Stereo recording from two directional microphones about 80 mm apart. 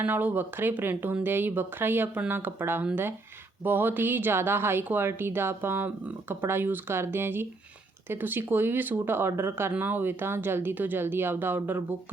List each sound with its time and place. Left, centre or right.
0.0 s speech: right